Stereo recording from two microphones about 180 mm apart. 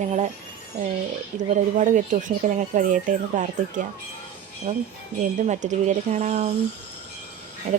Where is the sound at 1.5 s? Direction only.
45° right (ahead or behind).